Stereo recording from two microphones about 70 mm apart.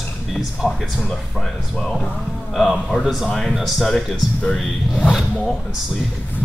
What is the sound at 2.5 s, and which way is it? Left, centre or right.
Speech, centre.